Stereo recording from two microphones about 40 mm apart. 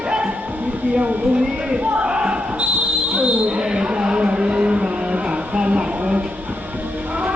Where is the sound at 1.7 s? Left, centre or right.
Right.